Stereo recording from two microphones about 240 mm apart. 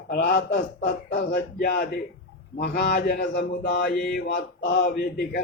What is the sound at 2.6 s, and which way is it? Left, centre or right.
Mantra, left.